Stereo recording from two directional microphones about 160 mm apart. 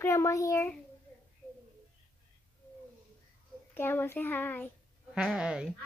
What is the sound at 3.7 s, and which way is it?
Speech, 15° left (ahead or behind).